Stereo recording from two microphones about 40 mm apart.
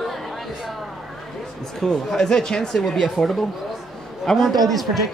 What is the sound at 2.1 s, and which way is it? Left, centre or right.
Speech, centre.